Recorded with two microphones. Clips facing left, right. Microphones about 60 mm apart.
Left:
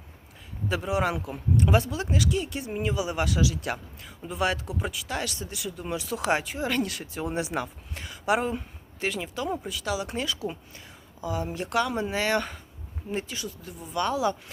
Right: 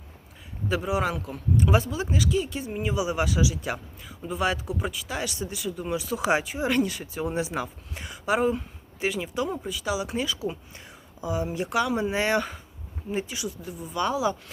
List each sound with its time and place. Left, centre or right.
0.7 s a man's voice: centre
1.1 s speech: centre
1.5 s a man's voice: centre
2.9 s a man's voice: centre
11.2 s speech: centre
12.1 s speech: centre